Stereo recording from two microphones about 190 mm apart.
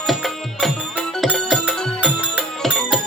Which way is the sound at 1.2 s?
Centre (ahead or behind).